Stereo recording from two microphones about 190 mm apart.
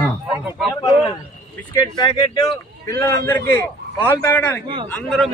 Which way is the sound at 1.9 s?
25° left (ahead or behind).